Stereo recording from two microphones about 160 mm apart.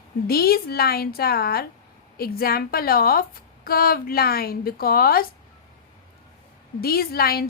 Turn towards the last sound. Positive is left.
turn(degrees=70)  # may be behind; listen again after turning